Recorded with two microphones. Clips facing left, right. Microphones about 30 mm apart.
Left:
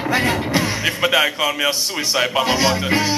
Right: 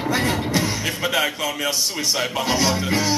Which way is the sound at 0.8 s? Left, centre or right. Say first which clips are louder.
Left 5 dB; left.